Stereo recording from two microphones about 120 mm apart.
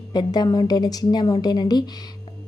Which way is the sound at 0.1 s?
35° left (ahead or behind).